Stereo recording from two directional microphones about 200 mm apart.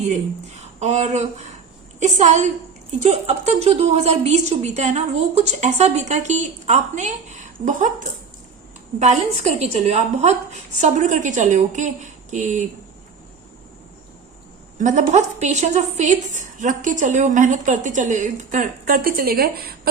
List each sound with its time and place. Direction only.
0.1 s a woman's voice: 35° right (ahead or behind)
14.8 s a woman's voice: 40° right (ahead or behind)